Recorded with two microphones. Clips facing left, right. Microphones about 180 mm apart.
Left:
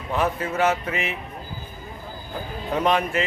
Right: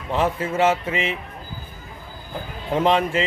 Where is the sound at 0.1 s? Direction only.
25° right (ahead or behind).